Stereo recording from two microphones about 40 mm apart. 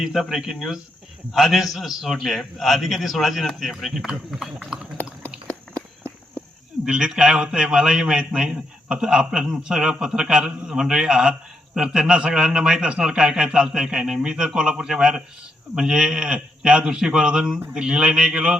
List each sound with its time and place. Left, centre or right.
0.0 s a man's voice: centre
5.0 s a sound: left
6.8 s a man's voice: centre